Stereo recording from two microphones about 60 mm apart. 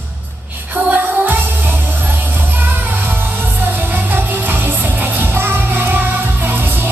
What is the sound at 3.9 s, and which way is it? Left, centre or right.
Music, right.